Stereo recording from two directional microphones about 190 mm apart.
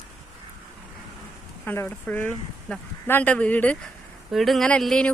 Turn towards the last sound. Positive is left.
turn(degrees=5)  # may be behind; listen again after turning